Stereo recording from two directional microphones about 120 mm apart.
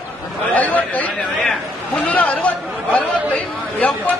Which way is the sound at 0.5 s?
10° left (ahead or behind).